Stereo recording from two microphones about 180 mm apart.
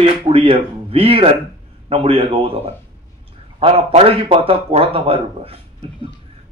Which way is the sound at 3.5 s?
30° right (ahead or behind).